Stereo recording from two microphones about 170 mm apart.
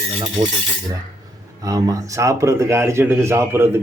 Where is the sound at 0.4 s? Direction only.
25° right (ahead or behind).